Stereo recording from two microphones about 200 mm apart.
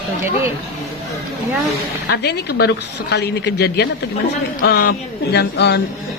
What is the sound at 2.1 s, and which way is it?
A woman's voice, 55° left (ahead or behind).